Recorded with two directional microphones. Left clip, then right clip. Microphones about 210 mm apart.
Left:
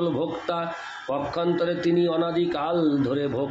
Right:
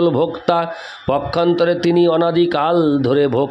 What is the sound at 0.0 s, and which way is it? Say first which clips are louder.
Speech: right 10 dB; 50° right (ahead or behind).